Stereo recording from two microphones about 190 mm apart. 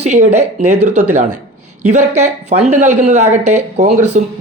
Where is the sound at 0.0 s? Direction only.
35° right (ahead or behind).